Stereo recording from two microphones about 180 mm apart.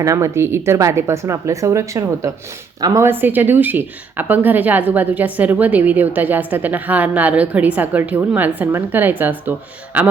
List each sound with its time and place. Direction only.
0.0 s speech: 15° right (ahead or behind)